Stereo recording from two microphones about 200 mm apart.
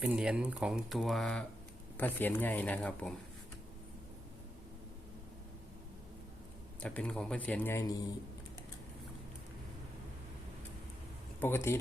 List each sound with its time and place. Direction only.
0.0 s speech: 5° right (ahead or behind)
6.7 s speech: 5° left (ahead or behind)
11.3 s speech: 10° left (ahead or behind)